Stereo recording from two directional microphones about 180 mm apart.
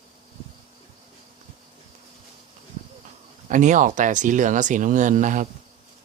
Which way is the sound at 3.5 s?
45° right (ahead or behind).